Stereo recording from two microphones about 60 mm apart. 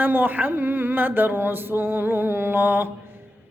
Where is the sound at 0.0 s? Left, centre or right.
Right.